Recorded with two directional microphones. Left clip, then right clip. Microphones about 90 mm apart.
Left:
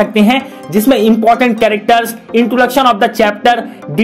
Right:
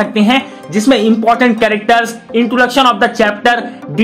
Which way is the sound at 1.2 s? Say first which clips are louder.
Left 1 dB; 40° left (ahead or behind).